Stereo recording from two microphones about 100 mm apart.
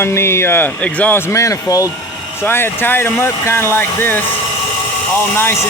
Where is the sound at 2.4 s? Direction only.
20° left (ahead or behind).